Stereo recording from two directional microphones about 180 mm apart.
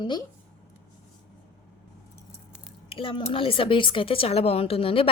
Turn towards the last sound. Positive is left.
turn(degrees=30)  # may be behind; listen again after turning